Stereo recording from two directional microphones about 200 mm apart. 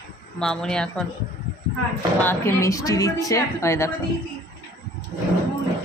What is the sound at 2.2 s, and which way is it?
A woman's voice, 10° left (ahead or behind).